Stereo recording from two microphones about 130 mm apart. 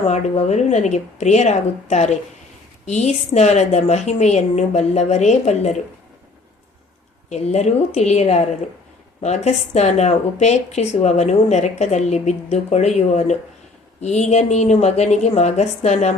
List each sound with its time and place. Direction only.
0.0 s a woman's voice: 55° left (ahead or behind)
7.3 s a woman's voice: 60° left (ahead or behind)